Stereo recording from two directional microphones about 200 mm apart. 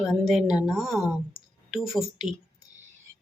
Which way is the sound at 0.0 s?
Centre (ahead or behind).